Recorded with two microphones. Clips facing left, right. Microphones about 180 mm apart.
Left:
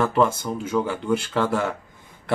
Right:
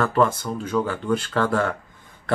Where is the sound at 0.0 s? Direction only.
15° left (ahead or behind).